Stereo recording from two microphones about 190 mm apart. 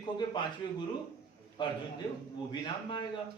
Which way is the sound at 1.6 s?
25° left (ahead or behind).